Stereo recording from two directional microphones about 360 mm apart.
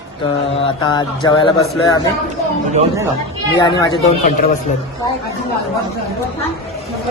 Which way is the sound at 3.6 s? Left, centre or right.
Centre.